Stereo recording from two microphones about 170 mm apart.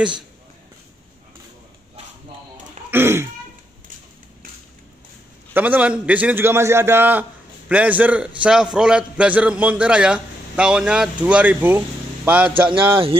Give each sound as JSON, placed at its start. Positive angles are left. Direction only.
{"t": 2.9, "sound": "speech", "side_deg": -15}
{"t": 5.5, "sound": "a man's voice", "side_deg": -10}
{"t": 12.9, "sound": "speech", "side_deg": -30}